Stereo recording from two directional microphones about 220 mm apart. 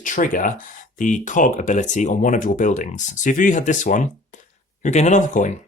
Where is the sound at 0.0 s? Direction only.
35° left (ahead or behind).